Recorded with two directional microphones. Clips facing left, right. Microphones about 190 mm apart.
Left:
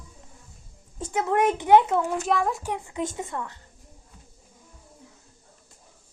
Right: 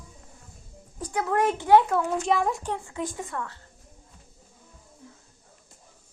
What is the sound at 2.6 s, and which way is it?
Speech, 15° left (ahead or behind).